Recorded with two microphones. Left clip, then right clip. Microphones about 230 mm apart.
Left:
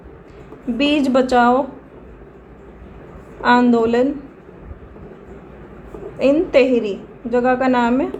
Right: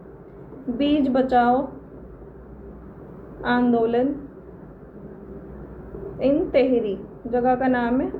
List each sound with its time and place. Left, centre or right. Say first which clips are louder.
0.8 s a woman's voice: left 5 dB; left
3.4 s a woman's voice: left 7 dB; left
6.1 s a woman's voice: left 6 dB; left